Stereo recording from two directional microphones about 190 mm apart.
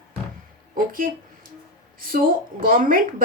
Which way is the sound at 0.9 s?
45° right (ahead or behind).